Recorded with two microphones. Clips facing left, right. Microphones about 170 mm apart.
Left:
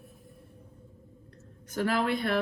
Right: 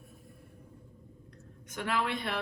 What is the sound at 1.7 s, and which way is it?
Speech, 40° left (ahead or behind).